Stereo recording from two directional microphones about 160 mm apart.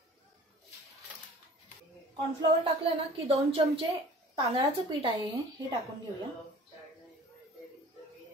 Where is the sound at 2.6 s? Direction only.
35° right (ahead or behind).